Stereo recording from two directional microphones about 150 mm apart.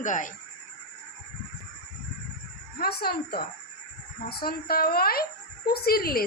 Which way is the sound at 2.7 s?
90° left.